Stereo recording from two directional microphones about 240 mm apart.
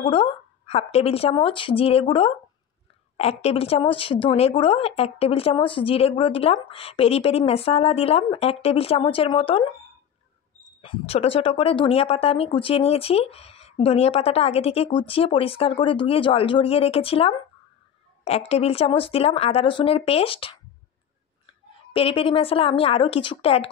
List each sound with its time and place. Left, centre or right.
0.0 s a woman's voice: left
10.8 s a woman's voice: left
21.7 s a woman's voice: left